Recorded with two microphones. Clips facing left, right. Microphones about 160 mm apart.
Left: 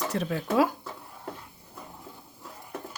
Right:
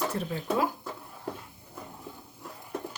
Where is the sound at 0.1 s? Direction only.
80° left.